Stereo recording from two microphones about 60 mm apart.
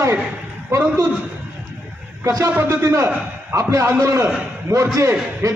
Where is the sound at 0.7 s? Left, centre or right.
Right.